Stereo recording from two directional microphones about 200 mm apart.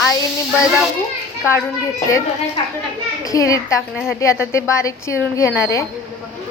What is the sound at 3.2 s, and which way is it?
Speech, 15° left (ahead or behind).